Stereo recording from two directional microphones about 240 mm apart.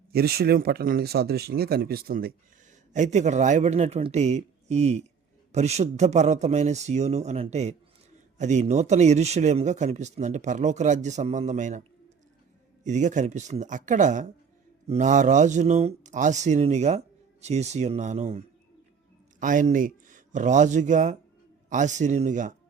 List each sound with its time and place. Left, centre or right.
0.1 s a man's voice: right